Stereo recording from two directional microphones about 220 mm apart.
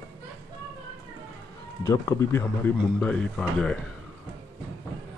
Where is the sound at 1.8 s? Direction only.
15° left (ahead or behind).